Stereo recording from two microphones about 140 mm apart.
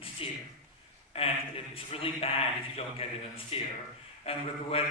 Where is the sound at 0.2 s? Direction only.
40° left (ahead or behind).